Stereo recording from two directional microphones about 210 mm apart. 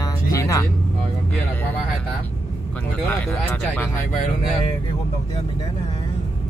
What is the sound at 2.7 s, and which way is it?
Speech, 5° left (ahead or behind).